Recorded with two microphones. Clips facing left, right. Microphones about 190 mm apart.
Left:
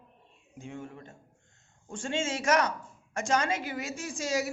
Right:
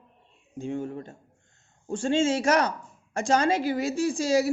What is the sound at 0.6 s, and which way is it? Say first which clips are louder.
A woman's voice: right 10 dB; 35° right (ahead or behind).